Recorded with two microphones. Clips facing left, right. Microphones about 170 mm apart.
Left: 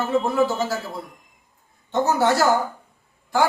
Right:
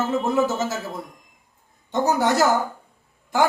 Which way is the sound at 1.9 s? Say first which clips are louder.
Left 1 dB; 15° right (ahead or behind).